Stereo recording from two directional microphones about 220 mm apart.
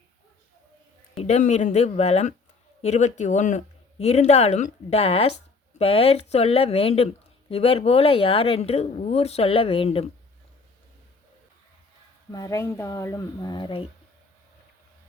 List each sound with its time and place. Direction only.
1.1 s speech: 30° left (ahead or behind)
12.3 s speech: 15° left (ahead or behind)